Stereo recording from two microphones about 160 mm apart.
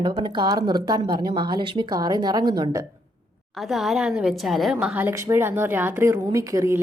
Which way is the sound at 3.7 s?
Centre (ahead or behind).